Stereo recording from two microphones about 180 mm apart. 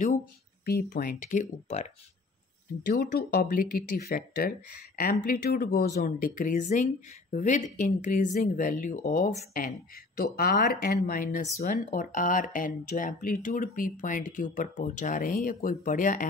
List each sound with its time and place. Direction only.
0.7 s speech: 55° left (ahead or behind); by 1.9 s 40° left (ahead or behind)
2.9 s speech: 60° left (ahead or behind)